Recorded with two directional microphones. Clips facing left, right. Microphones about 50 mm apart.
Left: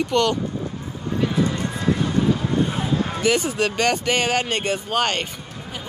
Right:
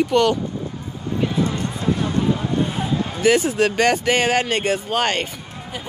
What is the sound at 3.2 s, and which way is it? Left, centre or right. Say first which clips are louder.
Speech: right 6 dB; centre.